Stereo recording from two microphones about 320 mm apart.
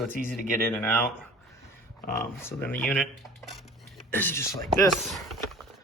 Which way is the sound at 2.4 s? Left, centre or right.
Centre.